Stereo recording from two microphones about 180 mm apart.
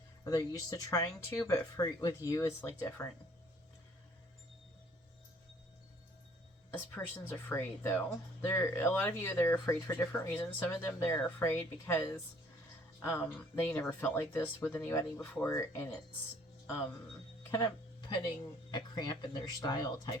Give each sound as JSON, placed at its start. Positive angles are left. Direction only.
{"t": 0.3, "sound": "speech", "side_deg": 20}
{"t": 6.7, "sound": "speech", "side_deg": 10}
{"t": 17.4, "sound": "music", "side_deg": 15}
{"t": 18.7, "sound": "speech", "side_deg": 25}